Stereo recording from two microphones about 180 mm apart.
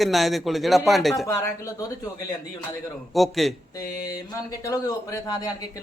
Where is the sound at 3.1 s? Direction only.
Centre (ahead or behind).